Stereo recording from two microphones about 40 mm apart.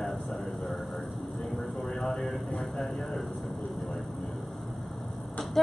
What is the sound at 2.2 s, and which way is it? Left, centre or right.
Speech, centre.